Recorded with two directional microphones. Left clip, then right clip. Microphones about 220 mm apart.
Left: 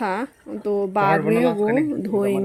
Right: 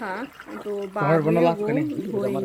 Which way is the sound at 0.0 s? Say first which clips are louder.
Left 6 dB; 40° left (ahead or behind).